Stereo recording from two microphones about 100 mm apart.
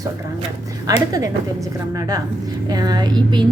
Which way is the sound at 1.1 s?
35° right (ahead or behind).